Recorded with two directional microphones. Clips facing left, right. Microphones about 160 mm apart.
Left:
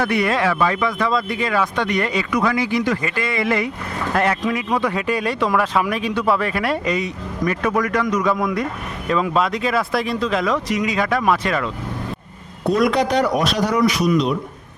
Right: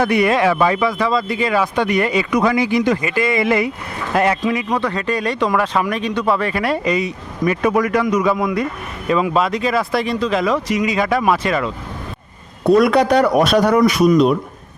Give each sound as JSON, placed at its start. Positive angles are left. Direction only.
{"t": 0.0, "sound": "speech", "side_deg": -15}
{"t": 0.8, "sound": "speech", "side_deg": -5}
{"t": 2.3, "sound": "speech", "side_deg": -20}
{"t": 4.7, "sound": "speech", "side_deg": 10}
{"t": 12.7, "sound": "speech", "side_deg": -60}